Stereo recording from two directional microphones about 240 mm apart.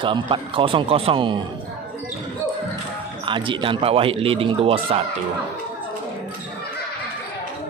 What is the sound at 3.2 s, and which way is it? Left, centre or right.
Speech, right.